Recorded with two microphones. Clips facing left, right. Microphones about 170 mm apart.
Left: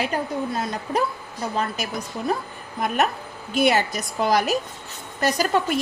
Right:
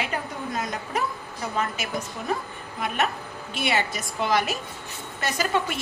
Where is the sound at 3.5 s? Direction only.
40° left (ahead or behind).